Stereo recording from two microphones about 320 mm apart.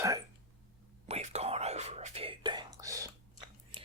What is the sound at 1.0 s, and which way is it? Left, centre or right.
Whispering, right.